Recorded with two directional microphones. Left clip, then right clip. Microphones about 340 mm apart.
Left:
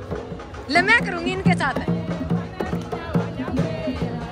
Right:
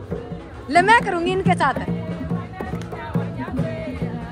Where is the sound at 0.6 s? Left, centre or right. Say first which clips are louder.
Right 3 dB; centre.